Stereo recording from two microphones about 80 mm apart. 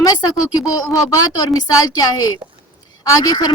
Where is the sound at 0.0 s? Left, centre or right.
Left.